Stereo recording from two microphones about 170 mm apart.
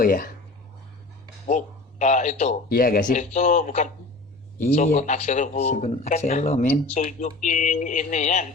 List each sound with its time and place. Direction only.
0.0 s speech: 55° left (ahead or behind)
1.5 s a man's voice: 45° left (ahead or behind)
2.6 s speech: 60° left (ahead or behind); by 8.4 s 45° left (ahead or behind)